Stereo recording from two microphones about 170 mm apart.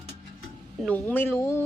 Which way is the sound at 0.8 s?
10° left (ahead or behind).